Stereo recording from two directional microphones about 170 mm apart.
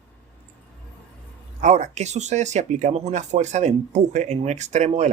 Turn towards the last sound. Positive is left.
turn(degrees=-40)  # may be behind; listen again after turning